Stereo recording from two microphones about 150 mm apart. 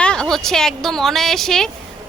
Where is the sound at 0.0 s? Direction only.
5° left (ahead or behind).